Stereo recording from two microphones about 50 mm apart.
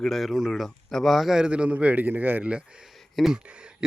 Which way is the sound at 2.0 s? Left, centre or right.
Right.